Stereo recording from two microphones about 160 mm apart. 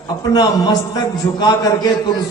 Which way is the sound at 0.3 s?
25° left (ahead or behind).